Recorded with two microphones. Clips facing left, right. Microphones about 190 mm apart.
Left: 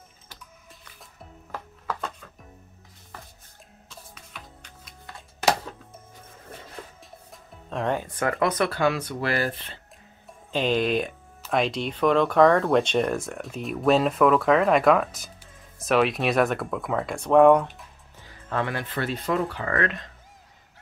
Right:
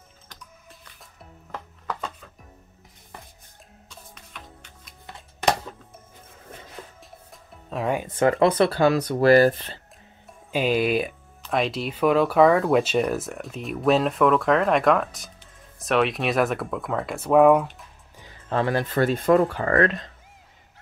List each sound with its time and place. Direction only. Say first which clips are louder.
0.3 s music: right 2 dB; centre (ahead or behind)
3.9 s music: left 1 dB; 5° left (ahead or behind)
7.0 s music: even; 5° right (ahead or behind)
8.1 s speech: right 6 dB; 25° right (ahead or behind)
10.5 s speech: right 1 dB; 10° right (ahead or behind)
18.5 s speech: right 5 dB; 35° right (ahead or behind)